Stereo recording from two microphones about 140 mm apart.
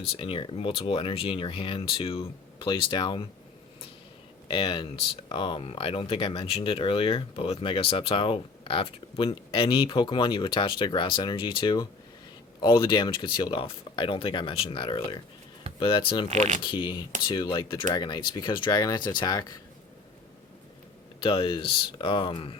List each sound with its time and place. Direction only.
0.2 s speech: 40° left (ahead or behind)
4.4 s speech: 40° left (ahead or behind)
16.3 s speech: 55° right (ahead or behind)
16.6 s speech: 35° left (ahead or behind)
21.2 s speech: 35° left (ahead or behind)